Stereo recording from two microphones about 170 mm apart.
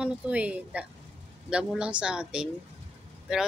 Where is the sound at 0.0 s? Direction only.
5° right (ahead or behind).